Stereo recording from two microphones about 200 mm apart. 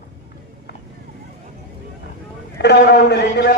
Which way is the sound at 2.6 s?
55° left (ahead or behind).